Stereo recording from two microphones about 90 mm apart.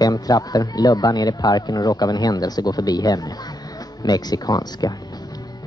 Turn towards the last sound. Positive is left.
turn(degrees=45)  # may be behind; listen again after turning